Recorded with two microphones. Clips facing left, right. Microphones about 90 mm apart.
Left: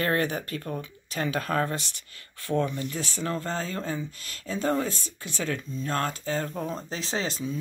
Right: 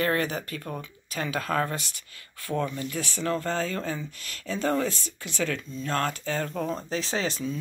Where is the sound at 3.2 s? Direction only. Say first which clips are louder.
Right 3 dB; 30° left (ahead or behind).